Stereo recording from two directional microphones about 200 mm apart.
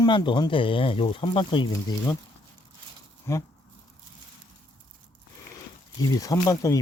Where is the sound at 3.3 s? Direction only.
15° left (ahead or behind).